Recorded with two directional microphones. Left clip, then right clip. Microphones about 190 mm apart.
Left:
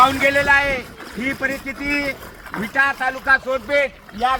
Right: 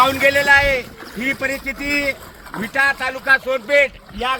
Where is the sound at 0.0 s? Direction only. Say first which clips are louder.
Even; 65° right (ahead or behind).